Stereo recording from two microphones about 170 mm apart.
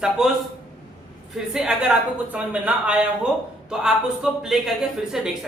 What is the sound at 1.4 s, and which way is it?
A man's voice, 5° right (ahead or behind).